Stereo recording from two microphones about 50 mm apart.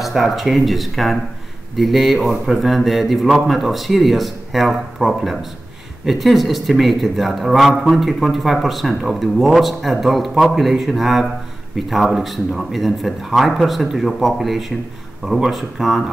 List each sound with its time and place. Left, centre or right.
0.0 s speech: centre